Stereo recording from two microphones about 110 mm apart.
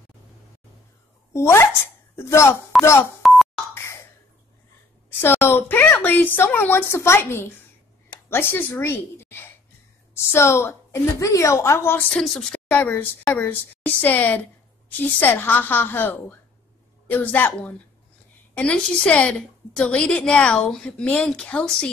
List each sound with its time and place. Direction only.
1.3 s a woman's voice: 25° left (ahead or behind)
2.7 s a sound: centre (ahead or behind)
3.2 s telephone dialing: centre (ahead or behind)
3.7 s a sound: 25° left (ahead or behind)
5.2 s a woman's voice: 20° left (ahead or behind)
12.1 s a woman's voice: 5° left (ahead or behind)
12.7 s a woman's voice: 15° left (ahead or behind)